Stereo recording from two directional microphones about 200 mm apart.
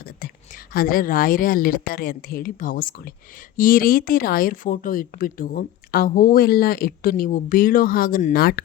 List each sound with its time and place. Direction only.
0.0 s a woman's voice: 50° left (ahead or behind)